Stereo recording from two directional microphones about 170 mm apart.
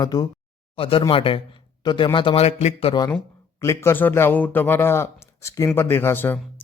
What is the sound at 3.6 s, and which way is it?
Speech, 15° left (ahead or behind).